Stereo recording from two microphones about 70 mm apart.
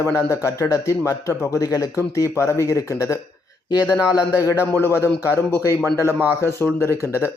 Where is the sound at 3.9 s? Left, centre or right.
Left.